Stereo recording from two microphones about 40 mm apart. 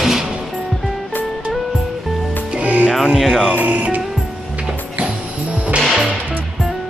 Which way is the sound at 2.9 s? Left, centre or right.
Centre.